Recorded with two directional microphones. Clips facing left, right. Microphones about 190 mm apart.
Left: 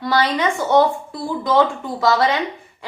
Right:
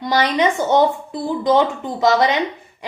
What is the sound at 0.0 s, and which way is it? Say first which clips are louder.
A woman's voice: right 2 dB; 20° right (ahead or behind).